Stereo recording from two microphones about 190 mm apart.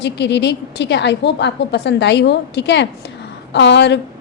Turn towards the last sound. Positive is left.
turn(degrees=65)  # may be behind; listen again after turning